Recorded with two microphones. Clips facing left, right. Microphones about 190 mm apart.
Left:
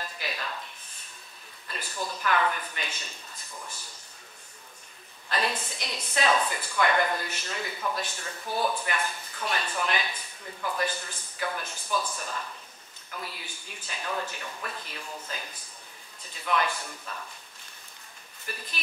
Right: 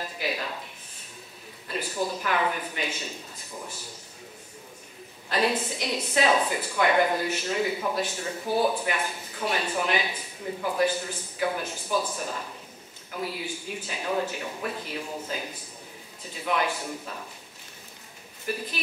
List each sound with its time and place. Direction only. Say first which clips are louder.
0.0 s a sound: right 5 dB; 10° right (ahead or behind)
1.7 s a man's voice: right 6 dB; 5° right (ahead or behind)
5.3 s speech: right 5 dB; 10° right (ahead or behind)
12.1 s speech: right 3 dB; 20° right (ahead or behind)
16.9 s speech: right 4 dB; 20° right (ahead or behind)
18.4 s speech: right 9 dB; 10° right (ahead or behind)